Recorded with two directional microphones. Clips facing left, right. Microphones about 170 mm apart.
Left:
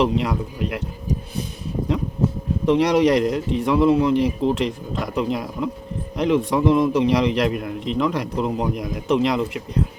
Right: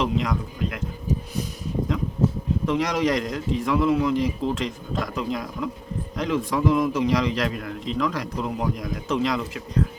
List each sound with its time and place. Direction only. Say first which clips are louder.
0.0 s a man's voice: left 4 dB; 30° left (ahead or behind)
2.6 s a man's voice: left 7 dB; 30° left (ahead or behind)